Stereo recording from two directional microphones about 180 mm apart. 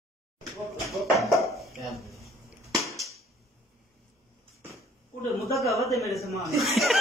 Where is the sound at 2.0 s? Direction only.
15° left (ahead or behind).